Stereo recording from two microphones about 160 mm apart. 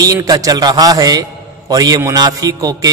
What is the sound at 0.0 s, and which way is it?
A man's voice, 20° right (ahead or behind).